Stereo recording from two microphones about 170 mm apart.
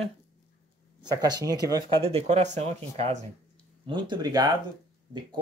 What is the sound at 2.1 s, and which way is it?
Speech, 40° right (ahead or behind).